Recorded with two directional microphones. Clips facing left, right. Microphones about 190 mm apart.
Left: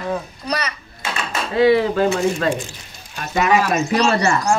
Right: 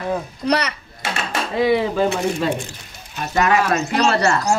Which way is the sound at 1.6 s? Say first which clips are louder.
Left 3 dB; centre (ahead or behind).